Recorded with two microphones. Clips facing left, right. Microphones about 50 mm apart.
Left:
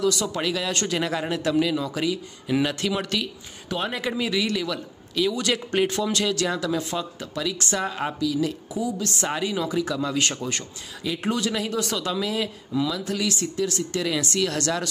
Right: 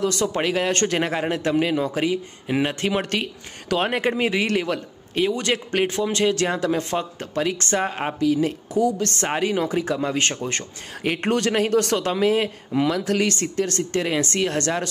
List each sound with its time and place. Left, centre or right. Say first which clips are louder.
0.0 s a man's voice: right 2 dB; right
8.7 s a man's voice: right 9 dB; right
11.0 s speech: right 4 dB; right